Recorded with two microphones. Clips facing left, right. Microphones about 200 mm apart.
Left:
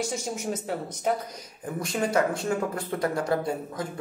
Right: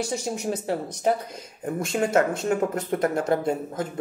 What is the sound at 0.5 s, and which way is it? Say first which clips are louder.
Speech: right 4 dB; 65° right (ahead or behind).